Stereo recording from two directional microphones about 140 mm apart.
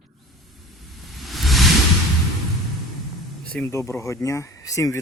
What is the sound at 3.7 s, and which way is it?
Speech, 20° left (ahead or behind).